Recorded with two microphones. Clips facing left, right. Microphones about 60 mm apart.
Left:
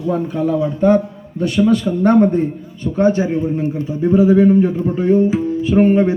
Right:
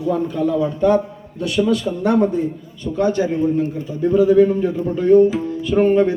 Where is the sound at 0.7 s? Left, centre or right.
Left.